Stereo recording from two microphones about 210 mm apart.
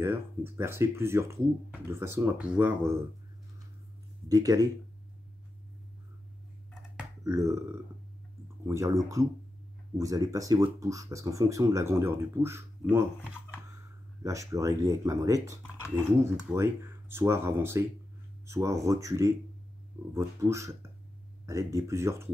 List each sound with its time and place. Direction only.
0.0 s speech: 10° right (ahead or behind)
4.3 s speech: 15° right (ahead or behind)
7.2 s speech: 15° right (ahead or behind)
8.6 s speech: 15° right (ahead or behind)
14.2 s speech: 15° right (ahead or behind)